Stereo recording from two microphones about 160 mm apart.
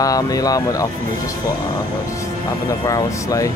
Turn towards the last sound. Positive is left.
turn(degrees=20)  # may be behind; listen again after turning